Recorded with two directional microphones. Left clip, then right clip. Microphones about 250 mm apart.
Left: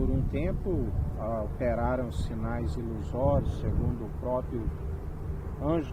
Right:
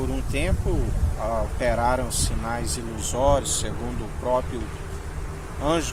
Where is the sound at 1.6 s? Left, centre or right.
Centre.